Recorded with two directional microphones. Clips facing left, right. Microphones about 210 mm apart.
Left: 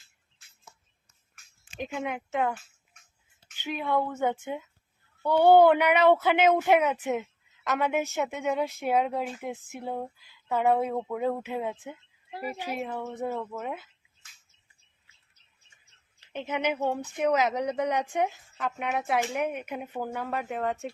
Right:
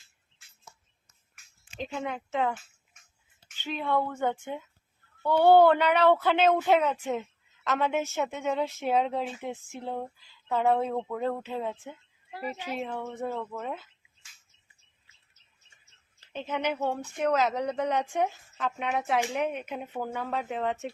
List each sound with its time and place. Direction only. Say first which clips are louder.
1.8 s speech: left 1 dB; 15° left (ahead or behind)
2.3 s speech: even; centre (ahead or behind)
3.5 s speech: left 1 dB; 15° left (ahead or behind)
9.7 s speech: left 1 dB; 10° left (ahead or behind)
12.8 s speech: left 1 dB; 5° left (ahead or behind)
16.3 s speech: left 1 dB; 15° left (ahead or behind)